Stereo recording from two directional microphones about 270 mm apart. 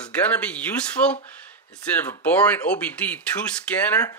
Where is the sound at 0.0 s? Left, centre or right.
Centre.